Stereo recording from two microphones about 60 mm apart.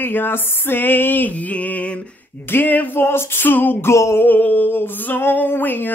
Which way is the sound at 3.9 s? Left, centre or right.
Left.